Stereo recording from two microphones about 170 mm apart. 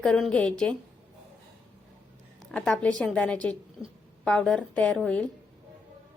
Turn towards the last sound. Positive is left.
turn(degrees=5)  # may be behind; listen again after turning